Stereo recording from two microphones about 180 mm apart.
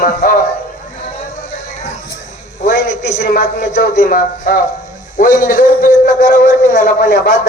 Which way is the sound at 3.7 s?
50° left (ahead or behind).